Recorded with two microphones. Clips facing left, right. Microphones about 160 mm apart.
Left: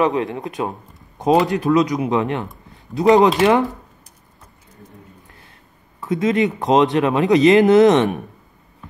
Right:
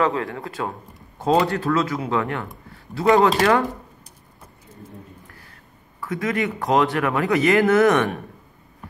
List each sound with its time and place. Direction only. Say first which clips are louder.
0.0 s speech: left 3 dB; 20° left (ahead or behind)
5.9 s speech: left 6 dB; 20° left (ahead or behind)